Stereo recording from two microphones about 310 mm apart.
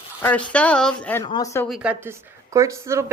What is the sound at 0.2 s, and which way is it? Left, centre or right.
A woman's voice, centre.